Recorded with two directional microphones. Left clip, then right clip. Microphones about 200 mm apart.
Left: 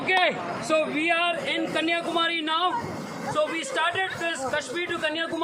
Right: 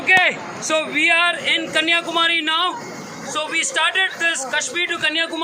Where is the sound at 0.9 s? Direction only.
15° right (ahead or behind).